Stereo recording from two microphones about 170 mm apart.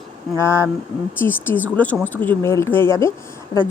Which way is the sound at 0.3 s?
15° left (ahead or behind).